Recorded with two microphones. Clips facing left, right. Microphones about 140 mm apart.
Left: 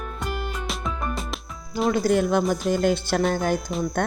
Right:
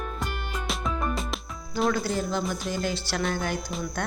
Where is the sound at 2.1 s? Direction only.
60° left (ahead or behind).